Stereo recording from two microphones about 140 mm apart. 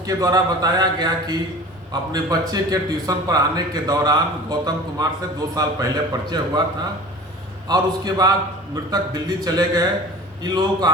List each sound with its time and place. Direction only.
0.0 s a man's voice: 25° right (ahead or behind)
7.7 s a man's voice: 30° right (ahead or behind)